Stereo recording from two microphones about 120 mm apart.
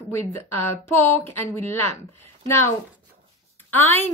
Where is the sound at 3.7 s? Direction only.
20° left (ahead or behind).